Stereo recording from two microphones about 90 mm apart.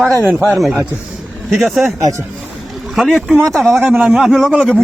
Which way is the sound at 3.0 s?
Centre (ahead or behind).